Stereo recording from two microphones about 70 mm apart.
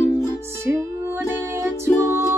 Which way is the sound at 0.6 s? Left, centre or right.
Right.